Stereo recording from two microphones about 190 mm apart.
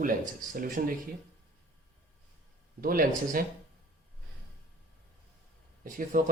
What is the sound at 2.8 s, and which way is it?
Speech, 50° right (ahead or behind).